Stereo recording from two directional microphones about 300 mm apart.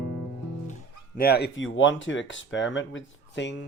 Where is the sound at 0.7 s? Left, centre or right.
Left.